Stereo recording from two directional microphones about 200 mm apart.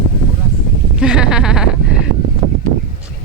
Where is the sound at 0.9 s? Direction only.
5° right (ahead or behind).